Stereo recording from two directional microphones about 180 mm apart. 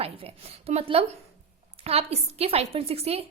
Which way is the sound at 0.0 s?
35° right (ahead or behind).